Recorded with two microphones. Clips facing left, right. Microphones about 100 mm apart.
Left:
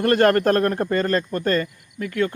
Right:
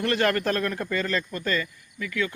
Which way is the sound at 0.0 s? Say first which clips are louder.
Left 7 dB; 45° left (ahead or behind).